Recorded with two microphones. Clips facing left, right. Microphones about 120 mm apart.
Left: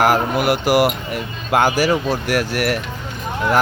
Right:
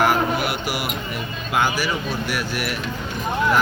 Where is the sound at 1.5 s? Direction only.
80° left.